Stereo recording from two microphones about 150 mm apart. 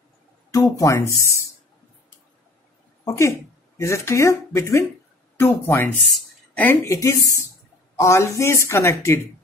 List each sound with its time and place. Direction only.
0.5 s speech: 20° left (ahead or behind)
3.1 s speech: 20° left (ahead or behind)
6.0 s a sound: centre (ahead or behind)
6.6 s speech: 15° left (ahead or behind)